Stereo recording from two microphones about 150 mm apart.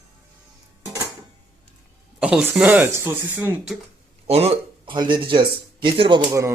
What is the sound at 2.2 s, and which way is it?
Speech, 10° right (ahead or behind).